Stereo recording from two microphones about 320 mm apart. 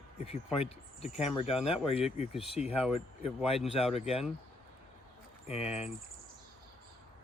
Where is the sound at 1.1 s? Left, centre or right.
Centre.